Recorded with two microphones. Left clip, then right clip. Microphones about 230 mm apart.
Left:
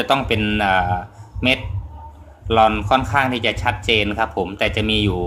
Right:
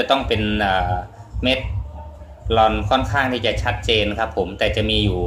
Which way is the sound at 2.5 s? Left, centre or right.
Left.